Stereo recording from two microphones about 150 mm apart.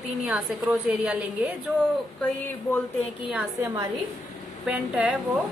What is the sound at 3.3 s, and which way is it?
Speech, 15° right (ahead or behind).